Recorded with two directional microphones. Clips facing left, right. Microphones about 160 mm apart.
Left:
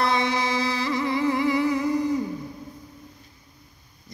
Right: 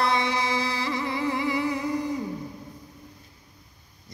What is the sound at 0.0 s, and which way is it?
Music, 25° right (ahead or behind).